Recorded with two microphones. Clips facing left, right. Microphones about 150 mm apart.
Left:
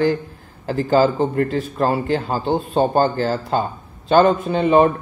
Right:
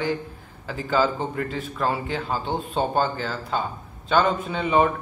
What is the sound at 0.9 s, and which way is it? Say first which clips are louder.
Speech: left 7 dB; 35° left (ahead or behind).